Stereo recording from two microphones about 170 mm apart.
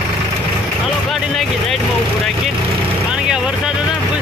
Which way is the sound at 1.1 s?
Centre (ahead or behind).